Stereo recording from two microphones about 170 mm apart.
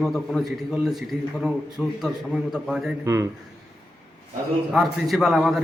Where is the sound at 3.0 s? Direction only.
15° right (ahead or behind).